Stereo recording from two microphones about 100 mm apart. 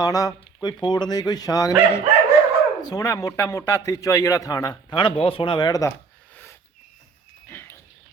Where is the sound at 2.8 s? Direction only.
40° left (ahead or behind).